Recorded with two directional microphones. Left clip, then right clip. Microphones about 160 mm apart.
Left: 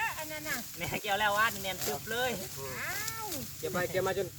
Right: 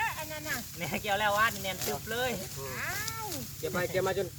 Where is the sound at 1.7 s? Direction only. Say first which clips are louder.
Right 1 dB; 10° left (ahead or behind).